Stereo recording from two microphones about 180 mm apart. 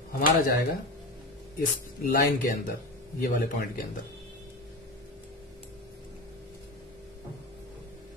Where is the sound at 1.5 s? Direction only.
55° left (ahead or behind).